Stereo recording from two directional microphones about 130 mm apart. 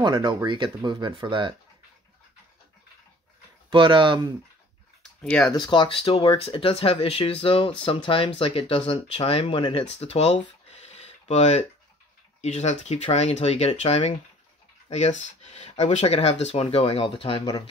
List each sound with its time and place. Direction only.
0.0 s speech: 35° right (ahead or behind)
3.7 s speech: 40° right (ahead or behind)
5.2 s speech: 10° left (ahead or behind)
5.5 s speech: 35° left (ahead or behind)
9.8 s a sound: 55° left (ahead or behind)
12.4 s speech: 60° left (ahead or behind); by 17.4 s 45° left (ahead or behind)